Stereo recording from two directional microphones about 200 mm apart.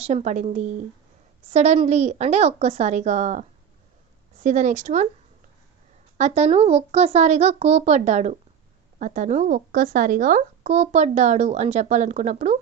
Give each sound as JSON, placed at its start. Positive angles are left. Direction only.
{"t": 0.1, "sound": "speech", "side_deg": -35}
{"t": 4.4, "sound": "speech", "side_deg": -35}
{"t": 6.1, "sound": "speech", "side_deg": -35}